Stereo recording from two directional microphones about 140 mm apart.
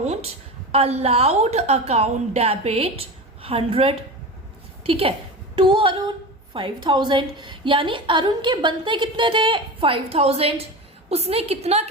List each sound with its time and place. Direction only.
0.0 s a woman's voice: 50° right (ahead or behind)